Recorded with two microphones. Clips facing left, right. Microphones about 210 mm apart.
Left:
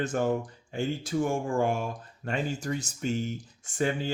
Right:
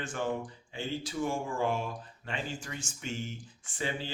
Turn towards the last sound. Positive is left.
turn(degrees=45)  # may be behind; listen again after turning